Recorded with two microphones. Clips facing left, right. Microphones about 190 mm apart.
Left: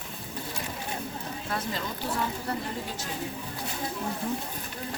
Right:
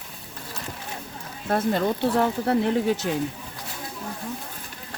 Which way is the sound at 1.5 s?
55° right (ahead or behind).